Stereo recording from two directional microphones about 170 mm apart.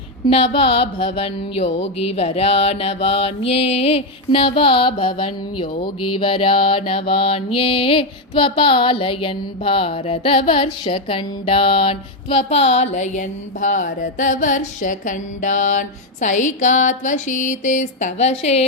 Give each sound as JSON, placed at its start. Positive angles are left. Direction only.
{"t": 0.3, "sound": "mantra", "side_deg": 35}